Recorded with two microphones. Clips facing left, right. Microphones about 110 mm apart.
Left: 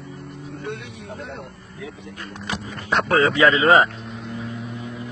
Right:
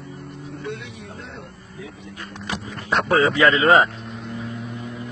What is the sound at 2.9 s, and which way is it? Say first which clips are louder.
Vehicle: even; centre (ahead or behind).